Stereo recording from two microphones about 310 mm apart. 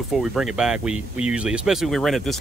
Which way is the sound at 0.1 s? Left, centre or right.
Centre.